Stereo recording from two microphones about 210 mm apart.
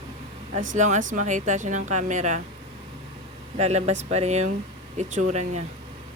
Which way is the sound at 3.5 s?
30° right (ahead or behind).